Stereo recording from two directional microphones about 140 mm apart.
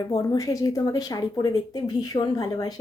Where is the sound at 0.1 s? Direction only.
25° left (ahead or behind).